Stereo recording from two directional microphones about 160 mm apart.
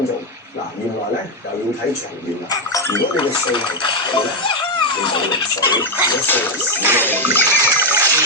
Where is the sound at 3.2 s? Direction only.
30° left (ahead or behind).